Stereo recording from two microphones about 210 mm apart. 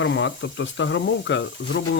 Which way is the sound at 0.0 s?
60° left (ahead or behind).